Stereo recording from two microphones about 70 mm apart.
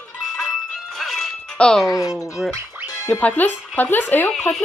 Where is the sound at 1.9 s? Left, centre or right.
Left.